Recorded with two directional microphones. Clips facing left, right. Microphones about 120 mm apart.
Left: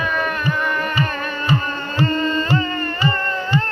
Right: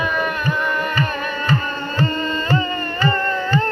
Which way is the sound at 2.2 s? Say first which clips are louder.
Left 1 dB; 20° right (ahead or behind).